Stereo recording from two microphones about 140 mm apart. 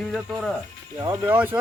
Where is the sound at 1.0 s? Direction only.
15° right (ahead or behind).